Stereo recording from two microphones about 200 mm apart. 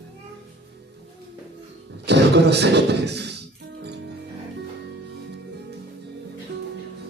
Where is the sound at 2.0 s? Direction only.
55° right (ahead or behind).